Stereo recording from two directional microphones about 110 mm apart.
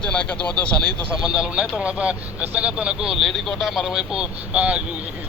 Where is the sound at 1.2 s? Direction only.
10° right (ahead or behind).